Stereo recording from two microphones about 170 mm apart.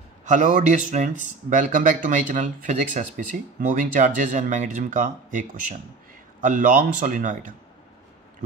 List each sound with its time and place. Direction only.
0.2 s speech: 45° right (ahead or behind)
6.4 s speech: 50° right (ahead or behind)